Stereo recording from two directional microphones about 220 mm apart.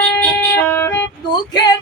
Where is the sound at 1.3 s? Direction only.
20° left (ahead or behind).